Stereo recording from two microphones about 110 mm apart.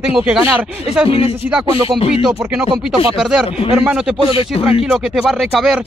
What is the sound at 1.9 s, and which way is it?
Speech, 60° left (ahead or behind).